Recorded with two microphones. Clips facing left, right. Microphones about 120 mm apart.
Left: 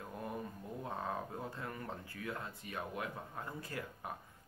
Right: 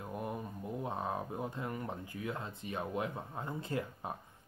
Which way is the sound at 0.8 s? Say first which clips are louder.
Right 2 dB; 20° right (ahead or behind).